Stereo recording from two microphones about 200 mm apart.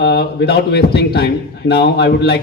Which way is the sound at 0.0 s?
55° left (ahead or behind).